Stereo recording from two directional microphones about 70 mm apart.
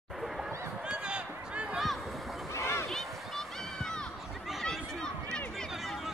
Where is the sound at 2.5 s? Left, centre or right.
Left.